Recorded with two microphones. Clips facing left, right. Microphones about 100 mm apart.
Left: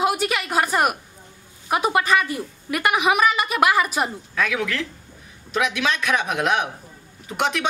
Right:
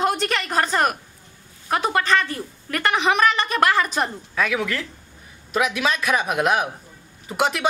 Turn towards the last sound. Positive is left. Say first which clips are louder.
# right 2 dB
turn(degrees=0)  # may be behind; listen again after turning